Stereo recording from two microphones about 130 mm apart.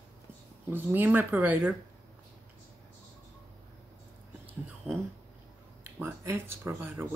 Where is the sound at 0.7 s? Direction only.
15° right (ahead or behind).